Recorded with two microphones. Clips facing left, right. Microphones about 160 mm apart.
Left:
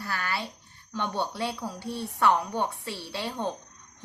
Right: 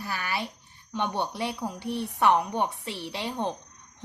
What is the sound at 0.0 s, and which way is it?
A woman's voice, 20° right (ahead or behind).